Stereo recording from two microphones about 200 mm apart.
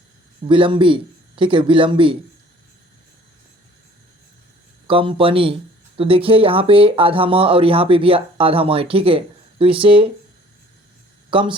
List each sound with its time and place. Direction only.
0.4 s speech: 25° right (ahead or behind)
4.9 s speech: 25° right (ahead or behind)
11.3 s speech: 25° right (ahead or behind)